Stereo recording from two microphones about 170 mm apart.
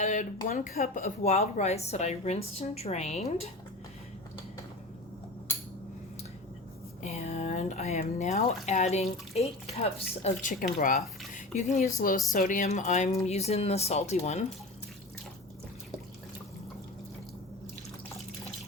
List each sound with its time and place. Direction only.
0.0 s speech: 45° left (ahead or behind)
7.0 s speech: 40° left (ahead or behind)